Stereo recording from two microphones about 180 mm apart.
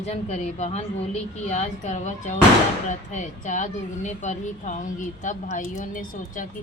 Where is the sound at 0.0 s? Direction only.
40° left (ahead or behind).